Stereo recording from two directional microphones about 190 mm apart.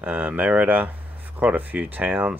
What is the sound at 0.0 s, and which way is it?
Speech, 10° right (ahead or behind).